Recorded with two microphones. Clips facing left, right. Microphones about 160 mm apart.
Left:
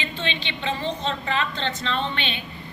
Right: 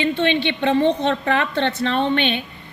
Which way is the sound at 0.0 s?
55° right (ahead or behind).